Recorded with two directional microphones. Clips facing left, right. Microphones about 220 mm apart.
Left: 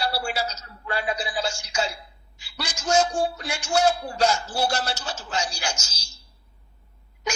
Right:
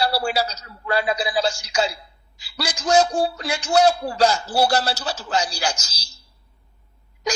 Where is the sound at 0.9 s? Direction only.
90° right.